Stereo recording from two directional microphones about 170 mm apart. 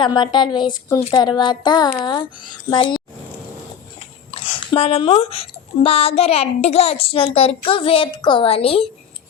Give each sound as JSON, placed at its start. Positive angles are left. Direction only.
{"t": 0.0, "sound": "speech", "side_deg": 25}
{"t": 4.4, "sound": "a woman's voice", "side_deg": 30}